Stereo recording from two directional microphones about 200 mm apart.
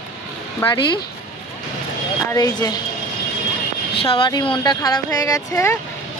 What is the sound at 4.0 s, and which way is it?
A woman's voice, 25° left (ahead or behind).